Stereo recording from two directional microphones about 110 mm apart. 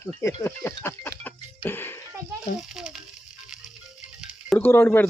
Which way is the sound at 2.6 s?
5° right (ahead or behind).